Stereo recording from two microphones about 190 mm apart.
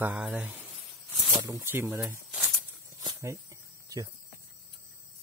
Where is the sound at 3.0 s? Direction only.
15° right (ahead or behind).